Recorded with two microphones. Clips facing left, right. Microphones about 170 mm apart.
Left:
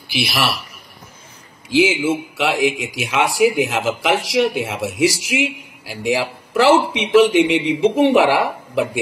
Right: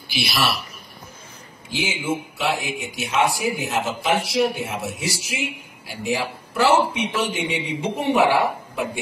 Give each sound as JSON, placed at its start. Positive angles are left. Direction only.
{"t": 1.7, "sound": "a man's voice", "side_deg": 90}